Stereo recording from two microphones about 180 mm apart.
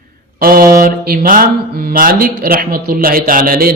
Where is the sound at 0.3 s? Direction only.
55° right (ahead or behind).